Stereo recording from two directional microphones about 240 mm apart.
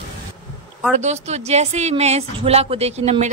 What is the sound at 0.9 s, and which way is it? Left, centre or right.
Speech, right.